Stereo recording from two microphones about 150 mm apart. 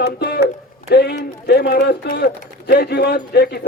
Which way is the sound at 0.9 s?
90° left.